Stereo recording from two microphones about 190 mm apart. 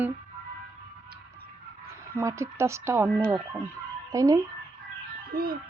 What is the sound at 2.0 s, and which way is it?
Speech, 15° right (ahead or behind).